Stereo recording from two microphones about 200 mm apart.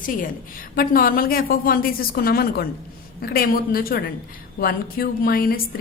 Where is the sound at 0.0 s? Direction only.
45° left (ahead or behind).